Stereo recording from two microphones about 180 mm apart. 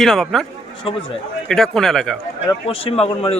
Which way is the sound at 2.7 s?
30° left (ahead or behind).